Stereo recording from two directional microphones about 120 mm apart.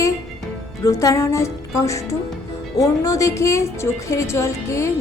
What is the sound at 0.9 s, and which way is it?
Speech, 25° left (ahead or behind).